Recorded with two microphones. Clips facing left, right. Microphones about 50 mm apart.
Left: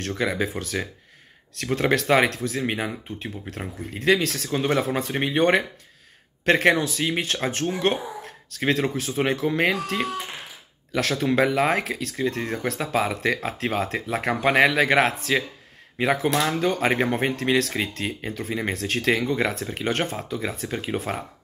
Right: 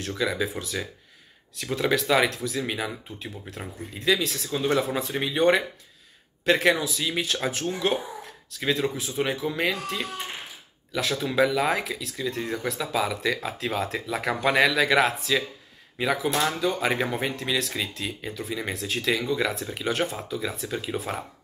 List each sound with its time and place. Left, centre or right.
0.2 s speech: left
4.6 s speech: left
6.4 s speech: left
8.5 s speech: left
11.2 s speech: left